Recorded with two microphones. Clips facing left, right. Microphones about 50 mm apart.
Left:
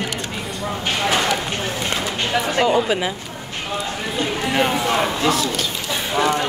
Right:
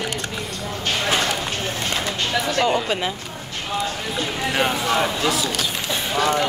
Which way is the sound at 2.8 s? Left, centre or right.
Centre.